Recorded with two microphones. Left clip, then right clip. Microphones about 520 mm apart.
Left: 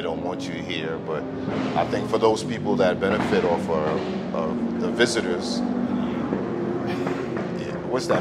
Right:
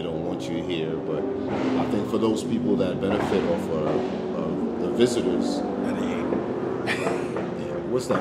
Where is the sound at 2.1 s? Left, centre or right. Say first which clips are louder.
Left 4 dB; left.